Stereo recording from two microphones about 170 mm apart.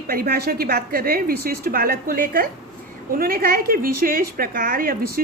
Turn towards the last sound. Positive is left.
turn(degrees=-60)  # may be behind; listen again after turning